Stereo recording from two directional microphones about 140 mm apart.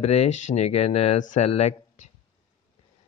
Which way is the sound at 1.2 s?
65° left (ahead or behind).